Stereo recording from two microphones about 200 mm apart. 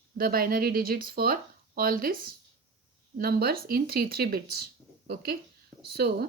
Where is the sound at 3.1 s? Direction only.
50° right (ahead or behind).